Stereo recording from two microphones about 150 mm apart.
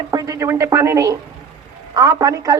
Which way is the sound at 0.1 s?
25° right (ahead or behind).